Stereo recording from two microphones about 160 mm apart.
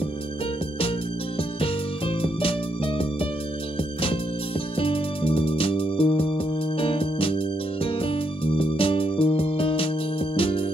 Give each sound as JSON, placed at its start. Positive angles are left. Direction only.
{"t": 1.6, "sound": "music", "side_deg": 35}
{"t": 4.7, "sound": "music", "side_deg": 35}